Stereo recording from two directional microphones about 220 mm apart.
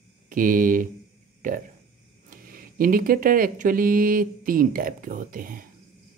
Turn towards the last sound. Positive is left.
turn(degrees=-40)  # may be behind; listen again after turning